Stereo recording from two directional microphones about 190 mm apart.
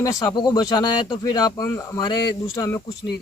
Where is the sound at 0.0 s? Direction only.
20° left (ahead or behind).